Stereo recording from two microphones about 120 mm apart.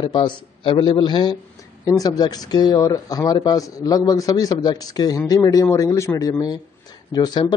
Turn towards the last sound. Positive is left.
turn(degrees=35)  # may be behind; listen again after turning